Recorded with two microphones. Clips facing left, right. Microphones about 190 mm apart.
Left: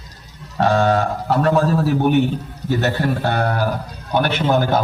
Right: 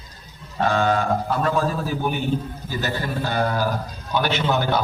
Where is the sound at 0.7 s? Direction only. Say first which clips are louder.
Left 4 dB; 40° left (ahead or behind).